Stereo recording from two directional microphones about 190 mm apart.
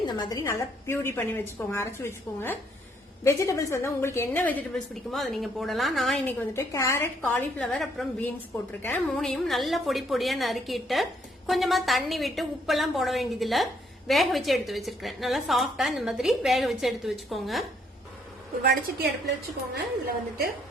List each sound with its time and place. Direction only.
0.0 s a woman's voice: 20° left (ahead or behind)
7.2 s a woman's voice: 5° left (ahead or behind)
18.6 s a woman's voice: 55° right (ahead or behind)